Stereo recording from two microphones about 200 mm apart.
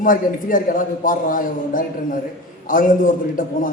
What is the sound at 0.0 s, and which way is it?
A man's voice, 45° left (ahead or behind).